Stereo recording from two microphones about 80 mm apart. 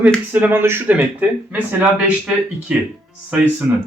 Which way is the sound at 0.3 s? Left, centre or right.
Right.